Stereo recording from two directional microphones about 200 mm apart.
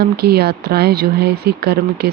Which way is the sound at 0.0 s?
50° right (ahead or behind).